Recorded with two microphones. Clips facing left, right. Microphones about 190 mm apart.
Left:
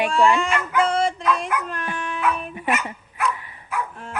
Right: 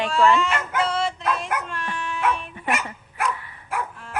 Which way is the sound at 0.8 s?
50° left (ahead or behind).